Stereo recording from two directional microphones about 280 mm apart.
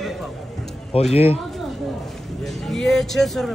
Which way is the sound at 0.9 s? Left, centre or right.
Centre.